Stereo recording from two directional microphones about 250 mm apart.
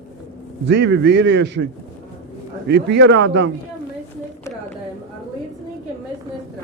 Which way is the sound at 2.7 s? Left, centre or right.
Right.